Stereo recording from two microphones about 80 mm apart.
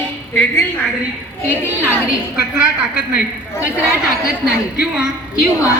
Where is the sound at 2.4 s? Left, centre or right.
Centre.